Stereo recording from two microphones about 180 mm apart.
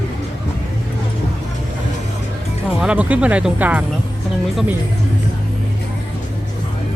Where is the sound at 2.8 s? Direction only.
5° right (ahead or behind).